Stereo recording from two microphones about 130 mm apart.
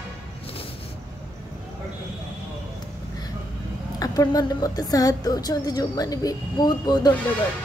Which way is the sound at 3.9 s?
25° left (ahead or behind).